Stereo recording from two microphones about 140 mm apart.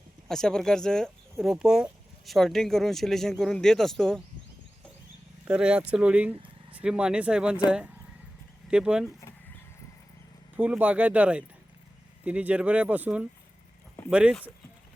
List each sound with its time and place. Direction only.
0.3 s speech: 5° left (ahead or behind)
5.5 s speech: 5° right (ahead or behind)
6.3 s vehicle: 40° right (ahead or behind)
6.7 s speech: 5° right (ahead or behind)
8.7 s speech: 5° right (ahead or behind)
10.6 s speech: 10° right (ahead or behind)